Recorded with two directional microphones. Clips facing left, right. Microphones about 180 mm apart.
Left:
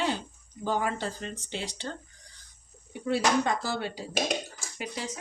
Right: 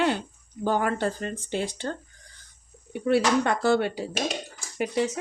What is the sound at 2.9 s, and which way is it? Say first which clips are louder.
Speech: right 4 dB; 65° right (ahead or behind).